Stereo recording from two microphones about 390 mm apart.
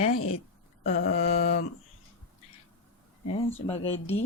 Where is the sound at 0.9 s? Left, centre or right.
Left.